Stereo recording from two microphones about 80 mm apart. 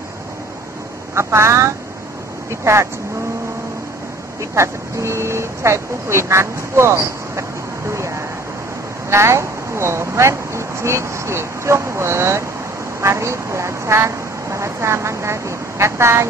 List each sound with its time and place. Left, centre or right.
1.1 s speech: right
4.4 s speech: right
7.9 s a sound: right
9.1 s speech: right